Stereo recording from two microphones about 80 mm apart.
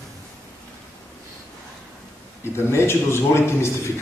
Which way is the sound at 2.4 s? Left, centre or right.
Left.